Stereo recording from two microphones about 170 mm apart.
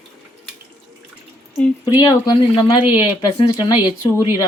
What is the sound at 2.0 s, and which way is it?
Speech, 25° left (ahead or behind).